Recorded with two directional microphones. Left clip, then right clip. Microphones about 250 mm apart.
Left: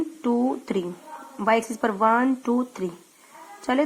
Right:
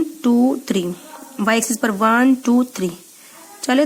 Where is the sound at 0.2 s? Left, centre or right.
Right.